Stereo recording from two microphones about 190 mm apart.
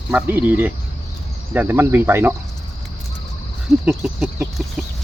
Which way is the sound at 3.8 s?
5° right (ahead or behind).